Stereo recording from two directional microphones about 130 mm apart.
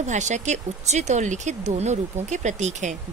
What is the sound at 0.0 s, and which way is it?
Speech, 65° right (ahead or behind).